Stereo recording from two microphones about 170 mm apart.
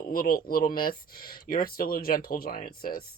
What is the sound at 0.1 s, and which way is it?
Speech, 60° left (ahead or behind).